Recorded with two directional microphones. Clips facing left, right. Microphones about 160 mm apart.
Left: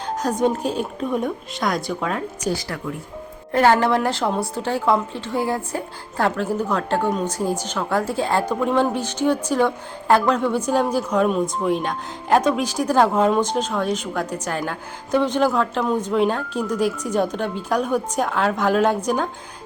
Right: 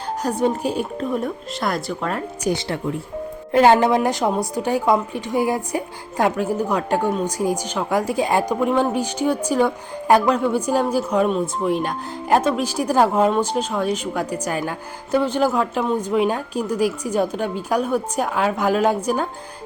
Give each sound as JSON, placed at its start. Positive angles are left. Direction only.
{"t": 0.2, "sound": "speech", "side_deg": -10}
{"t": 2.5, "sound": "speech", "side_deg": -25}